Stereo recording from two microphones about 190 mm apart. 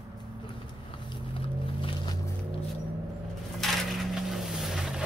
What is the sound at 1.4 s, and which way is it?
Boat, 25° left (ahead or behind).